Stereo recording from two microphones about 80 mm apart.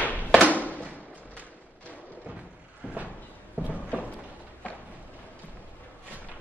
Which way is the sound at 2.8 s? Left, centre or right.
Right.